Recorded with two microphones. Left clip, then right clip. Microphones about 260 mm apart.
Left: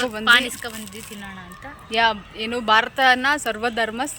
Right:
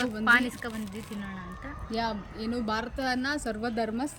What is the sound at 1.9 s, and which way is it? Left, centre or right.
Speech, left.